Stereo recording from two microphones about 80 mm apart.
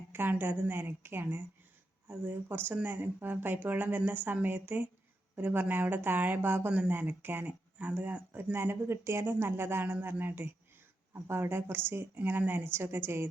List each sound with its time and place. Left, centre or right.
0.1 s speech: right